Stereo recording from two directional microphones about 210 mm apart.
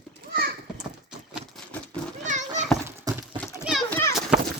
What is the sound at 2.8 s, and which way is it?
Horse, 15° right (ahead or behind).